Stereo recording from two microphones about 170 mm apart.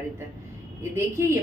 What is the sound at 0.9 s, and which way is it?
Speech, 15° right (ahead or behind).